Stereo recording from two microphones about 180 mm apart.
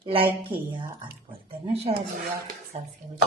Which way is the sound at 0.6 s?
25° right (ahead or behind).